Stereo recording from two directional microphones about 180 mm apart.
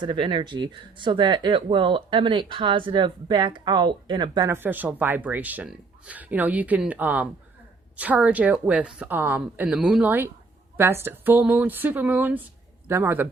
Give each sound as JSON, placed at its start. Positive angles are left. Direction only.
{"t": 0.0, "sound": "a woman's voice", "side_deg": -25}